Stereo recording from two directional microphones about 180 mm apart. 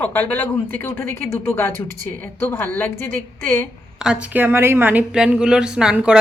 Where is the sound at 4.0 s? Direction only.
5° right (ahead or behind).